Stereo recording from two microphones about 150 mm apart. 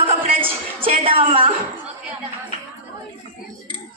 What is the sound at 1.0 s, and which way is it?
Speech, 40° right (ahead or behind).